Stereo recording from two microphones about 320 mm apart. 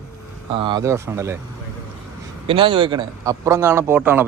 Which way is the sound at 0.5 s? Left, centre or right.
Centre.